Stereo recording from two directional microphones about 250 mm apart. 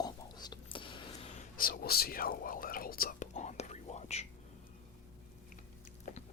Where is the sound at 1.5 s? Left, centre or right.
Left.